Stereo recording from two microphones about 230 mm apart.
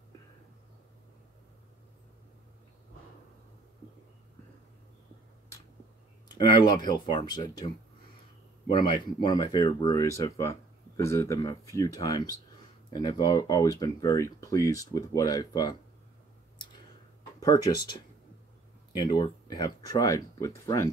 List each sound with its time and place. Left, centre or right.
6.3 s speech: centre
8.7 s speech: centre
17.4 s speech: centre